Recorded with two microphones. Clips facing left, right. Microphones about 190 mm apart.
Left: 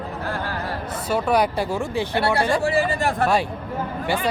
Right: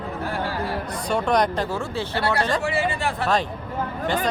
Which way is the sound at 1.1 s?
5° left (ahead or behind).